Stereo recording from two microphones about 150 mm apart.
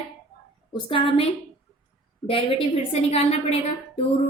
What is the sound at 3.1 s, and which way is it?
Speech, 45° left (ahead or behind).